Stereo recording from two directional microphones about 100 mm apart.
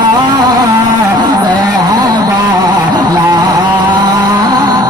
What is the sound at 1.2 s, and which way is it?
Music, 45° right (ahead or behind).